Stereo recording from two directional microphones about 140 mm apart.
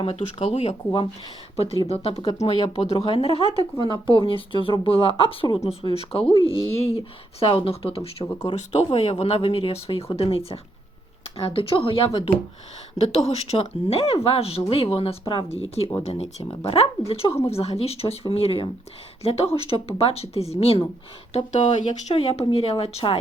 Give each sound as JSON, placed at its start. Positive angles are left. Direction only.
{"t": 0.0, "sound": "speech", "side_deg": 45}